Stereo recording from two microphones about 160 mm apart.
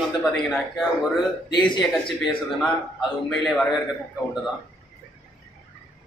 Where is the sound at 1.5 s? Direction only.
30° left (ahead or behind).